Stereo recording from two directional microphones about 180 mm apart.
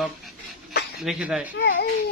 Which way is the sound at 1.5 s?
75° left (ahead or behind).